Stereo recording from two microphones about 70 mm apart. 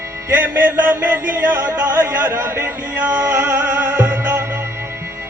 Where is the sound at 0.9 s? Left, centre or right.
Right.